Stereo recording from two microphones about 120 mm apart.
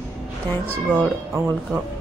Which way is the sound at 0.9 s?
5° right (ahead or behind).